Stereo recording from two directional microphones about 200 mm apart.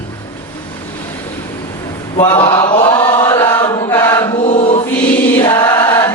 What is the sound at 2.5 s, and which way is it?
Chant, 15° left (ahead or behind).